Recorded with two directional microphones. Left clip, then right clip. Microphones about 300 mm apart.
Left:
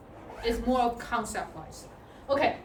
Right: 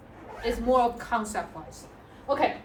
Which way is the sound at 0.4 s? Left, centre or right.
Centre.